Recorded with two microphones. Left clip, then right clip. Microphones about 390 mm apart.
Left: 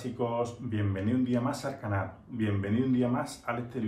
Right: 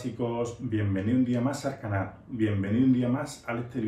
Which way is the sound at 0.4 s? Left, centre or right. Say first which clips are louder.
Right 2 dB; centre.